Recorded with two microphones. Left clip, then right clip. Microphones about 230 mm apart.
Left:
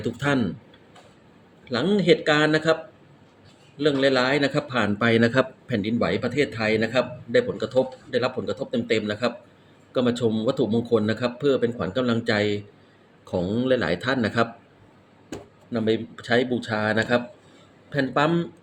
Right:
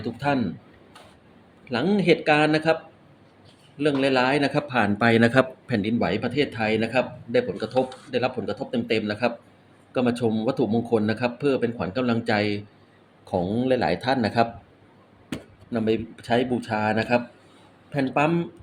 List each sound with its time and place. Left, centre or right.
0.0 s speech: centre
1.7 s a man's voice: centre
3.8 s a man's voice: centre
13.5 s a man's voice: centre
15.7 s speech: centre
16.6 s a man's voice: centre
17.9 s a man's voice: centre